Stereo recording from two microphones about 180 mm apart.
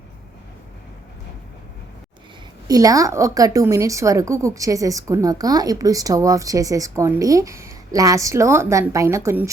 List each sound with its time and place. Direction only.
2.6 s a woman's voice: 20° right (ahead or behind)